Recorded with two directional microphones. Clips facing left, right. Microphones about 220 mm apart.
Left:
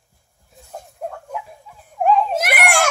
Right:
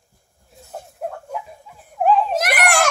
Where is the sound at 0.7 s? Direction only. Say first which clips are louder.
Right 1 dB; 5° right (ahead or behind).